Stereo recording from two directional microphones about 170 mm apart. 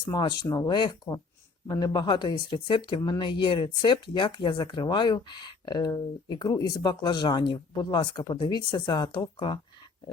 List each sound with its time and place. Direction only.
0.1 s speech: 25° left (ahead or behind)